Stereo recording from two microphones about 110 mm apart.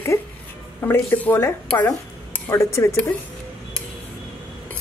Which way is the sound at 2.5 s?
25° left (ahead or behind).